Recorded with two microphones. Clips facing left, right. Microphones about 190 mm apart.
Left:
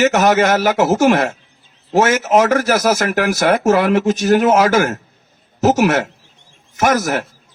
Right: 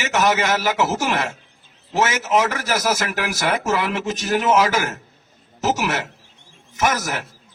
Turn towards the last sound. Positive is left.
turn(degrees=50)  # may be behind; listen again after turning